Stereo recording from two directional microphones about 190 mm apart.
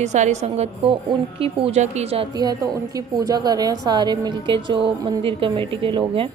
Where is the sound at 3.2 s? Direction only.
20° right (ahead or behind).